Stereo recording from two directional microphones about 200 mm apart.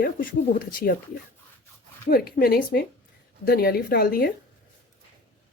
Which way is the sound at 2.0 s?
45° left (ahead or behind).